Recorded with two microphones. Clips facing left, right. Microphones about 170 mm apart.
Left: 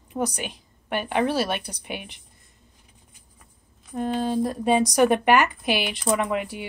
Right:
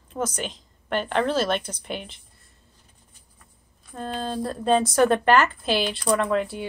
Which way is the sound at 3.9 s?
15° left (ahead or behind).